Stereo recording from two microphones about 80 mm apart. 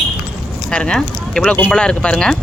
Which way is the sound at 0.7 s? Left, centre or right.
Centre.